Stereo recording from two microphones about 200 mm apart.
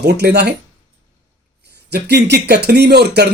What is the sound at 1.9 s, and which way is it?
A man's voice, 55° right (ahead or behind).